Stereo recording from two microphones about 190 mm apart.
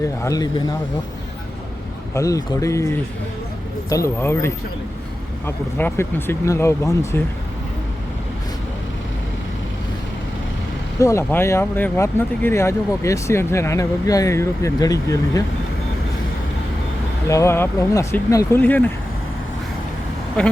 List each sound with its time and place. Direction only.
0.2 s speech: 20° left (ahead or behind)
2.1 s speech: 15° left (ahead or behind)
11.0 s speech: 15° left (ahead or behind)
17.2 s speech: 15° left (ahead or behind)